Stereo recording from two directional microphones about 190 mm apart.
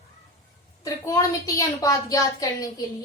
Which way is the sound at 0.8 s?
20° left (ahead or behind).